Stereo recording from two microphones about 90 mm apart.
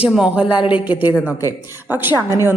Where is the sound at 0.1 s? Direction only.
10° right (ahead or behind).